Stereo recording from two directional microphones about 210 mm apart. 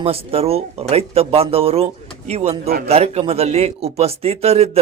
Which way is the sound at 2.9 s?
30° right (ahead or behind).